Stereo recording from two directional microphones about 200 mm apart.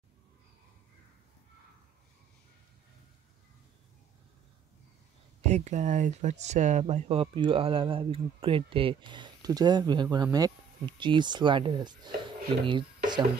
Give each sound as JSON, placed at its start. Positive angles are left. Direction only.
{"t": 5.4, "sound": "speech", "side_deg": -35}
{"t": 12.6, "sound": "stir", "side_deg": -20}